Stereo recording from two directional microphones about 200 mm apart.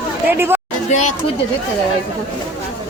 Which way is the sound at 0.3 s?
10° right (ahead or behind).